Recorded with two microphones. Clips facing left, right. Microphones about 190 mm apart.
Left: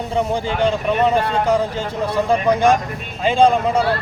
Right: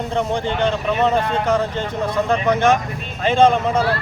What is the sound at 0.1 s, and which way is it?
Speech, 10° left (ahead or behind).